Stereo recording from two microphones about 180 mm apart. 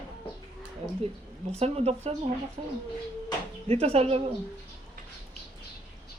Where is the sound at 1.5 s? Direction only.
35° right (ahead or behind).